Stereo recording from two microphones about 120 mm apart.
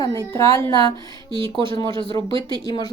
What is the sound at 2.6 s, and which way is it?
Speech, 35° left (ahead or behind).